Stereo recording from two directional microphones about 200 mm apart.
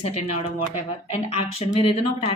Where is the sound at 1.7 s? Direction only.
30° left (ahead or behind).